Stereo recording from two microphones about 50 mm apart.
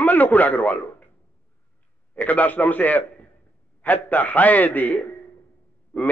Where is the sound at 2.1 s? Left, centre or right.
Left.